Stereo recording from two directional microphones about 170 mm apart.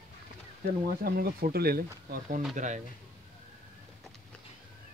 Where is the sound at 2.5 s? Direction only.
45° right (ahead or behind).